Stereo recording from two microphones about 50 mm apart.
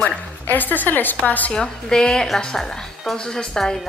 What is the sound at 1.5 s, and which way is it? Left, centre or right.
Speech, centre.